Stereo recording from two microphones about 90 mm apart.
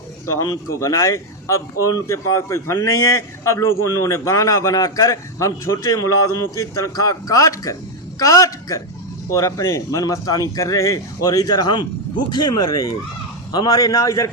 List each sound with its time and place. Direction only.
0.3 s a man's voice: 40° left (ahead or behind)